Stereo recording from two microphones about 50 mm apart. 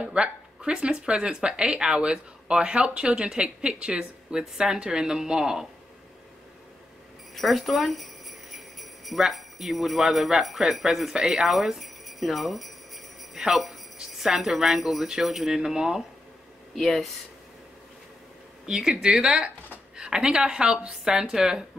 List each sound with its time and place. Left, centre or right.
0.0 s speech: right
7.3 s speech: centre
11.8 s jingle bell: centre
13.9 s speech: centre
16.7 s speech: centre
18.7 s speech: centre